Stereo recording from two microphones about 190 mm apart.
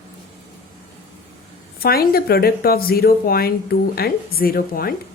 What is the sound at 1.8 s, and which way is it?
Speech, 50° left (ahead or behind).